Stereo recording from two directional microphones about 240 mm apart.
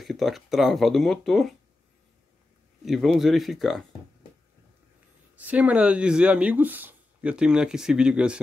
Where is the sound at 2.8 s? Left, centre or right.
Centre.